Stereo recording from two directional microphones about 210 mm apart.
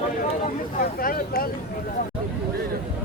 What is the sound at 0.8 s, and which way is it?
Speech, 45° left (ahead or behind).